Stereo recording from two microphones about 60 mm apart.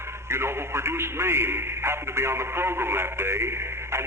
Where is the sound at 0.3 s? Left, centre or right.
Right.